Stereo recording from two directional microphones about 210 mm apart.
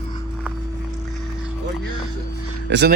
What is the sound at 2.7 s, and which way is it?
Speech, 55° right (ahead or behind).